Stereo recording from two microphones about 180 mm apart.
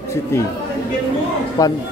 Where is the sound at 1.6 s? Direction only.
20° left (ahead or behind).